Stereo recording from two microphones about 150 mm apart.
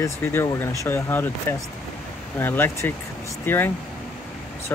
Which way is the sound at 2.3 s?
15° left (ahead or behind).